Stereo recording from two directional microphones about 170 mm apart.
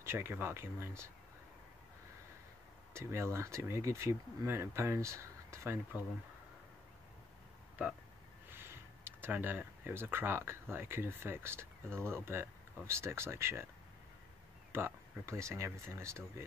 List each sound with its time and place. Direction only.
0.0 s speech: 15° right (ahead or behind)
2.9 s speech: 15° right (ahead or behind)
8.5 s speech: 15° right (ahead or behind)
14.7 s speech: 15° right (ahead or behind)